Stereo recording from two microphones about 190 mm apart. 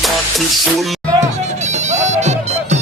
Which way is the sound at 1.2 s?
40° right (ahead or behind).